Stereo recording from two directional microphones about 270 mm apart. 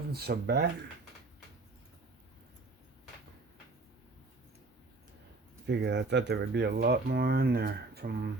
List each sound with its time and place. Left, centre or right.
0.1 s speech: right
5.6 s speech: right